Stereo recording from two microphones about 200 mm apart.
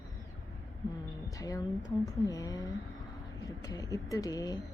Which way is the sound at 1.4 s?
15° left (ahead or behind).